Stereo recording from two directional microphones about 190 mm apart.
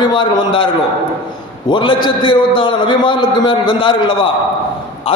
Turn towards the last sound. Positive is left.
turn(degrees=25)  # may be behind; listen again after turning